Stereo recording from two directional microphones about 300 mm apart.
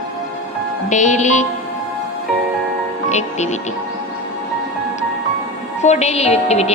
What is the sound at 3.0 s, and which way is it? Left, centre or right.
Speech, left.